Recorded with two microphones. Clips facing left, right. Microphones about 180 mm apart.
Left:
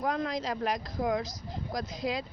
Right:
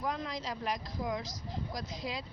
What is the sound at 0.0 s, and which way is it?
Speech, 50° left (ahead or behind).